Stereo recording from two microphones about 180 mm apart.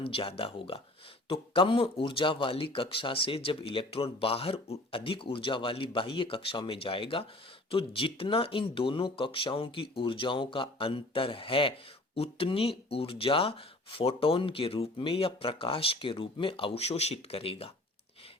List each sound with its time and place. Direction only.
0.0 s speech: 30° left (ahead or behind)